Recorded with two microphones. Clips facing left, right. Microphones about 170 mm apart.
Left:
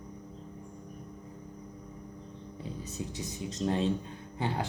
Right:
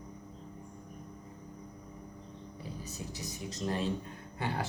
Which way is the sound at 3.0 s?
20° left (ahead or behind).